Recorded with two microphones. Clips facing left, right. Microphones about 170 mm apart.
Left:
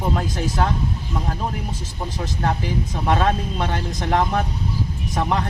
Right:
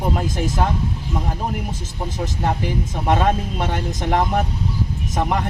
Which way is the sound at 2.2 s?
15° right (ahead or behind).